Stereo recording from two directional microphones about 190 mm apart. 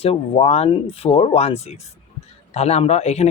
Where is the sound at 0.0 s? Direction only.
30° left (ahead or behind).